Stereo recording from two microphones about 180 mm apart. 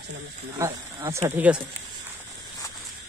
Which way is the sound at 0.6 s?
15° right (ahead or behind).